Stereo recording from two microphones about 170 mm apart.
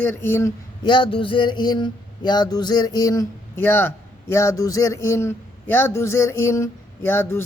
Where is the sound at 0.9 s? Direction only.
30° left (ahead or behind).